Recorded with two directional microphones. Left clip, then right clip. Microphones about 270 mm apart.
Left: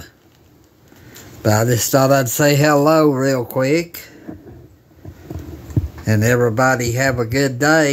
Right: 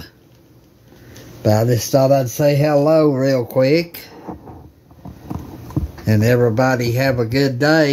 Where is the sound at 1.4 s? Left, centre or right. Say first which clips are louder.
Even; centre.